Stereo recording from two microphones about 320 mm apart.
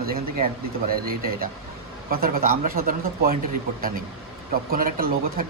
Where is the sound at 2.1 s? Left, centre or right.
Right.